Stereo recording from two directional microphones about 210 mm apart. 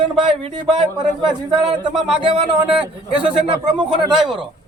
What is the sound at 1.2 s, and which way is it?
Speech, 20° right (ahead or behind).